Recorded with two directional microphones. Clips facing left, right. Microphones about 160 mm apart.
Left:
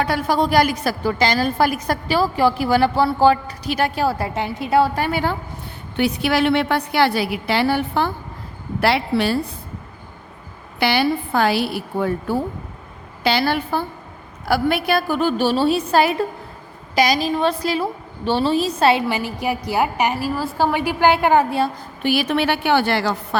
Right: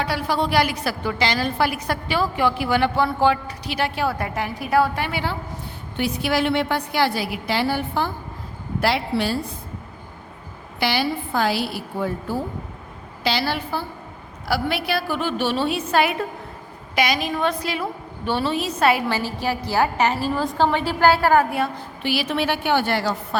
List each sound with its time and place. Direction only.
0.0 s a woman's voice: 50° left (ahead or behind); by 4.9 s 25° left (ahead or behind)
4.9 s a woman's voice: 45° left (ahead or behind)
6.0 s a woman's voice: 65° left (ahead or behind)
10.8 s a woman's voice: 60° left (ahead or behind); by 19.0 s 30° left (ahead or behind)
19.0 s a woman's voice: 15° left (ahead or behind); by 21.8 s 30° left (ahead or behind)
22.0 s a woman's voice: 55° left (ahead or behind); by 23.4 s 85° left